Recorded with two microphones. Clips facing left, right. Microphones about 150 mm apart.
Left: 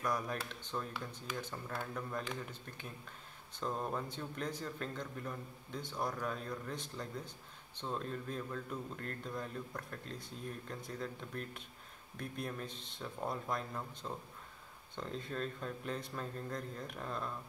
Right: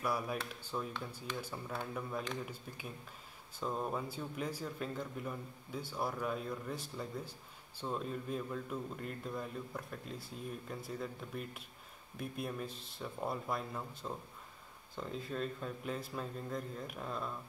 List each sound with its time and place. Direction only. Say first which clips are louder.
0.0 s speech: right 1 dB; 10° right (ahead or behind)